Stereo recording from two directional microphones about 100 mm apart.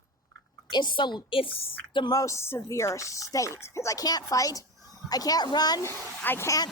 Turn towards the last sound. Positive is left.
turn(degrees=40)  # may be behind; listen again after turning